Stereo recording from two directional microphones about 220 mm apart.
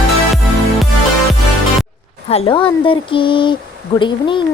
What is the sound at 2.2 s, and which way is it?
A woman's voice, 25° left (ahead or behind).